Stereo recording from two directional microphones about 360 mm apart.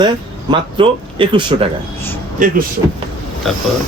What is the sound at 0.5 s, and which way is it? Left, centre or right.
Speech, centre.